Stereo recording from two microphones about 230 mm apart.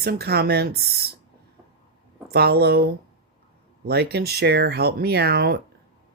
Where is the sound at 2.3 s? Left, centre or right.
Right.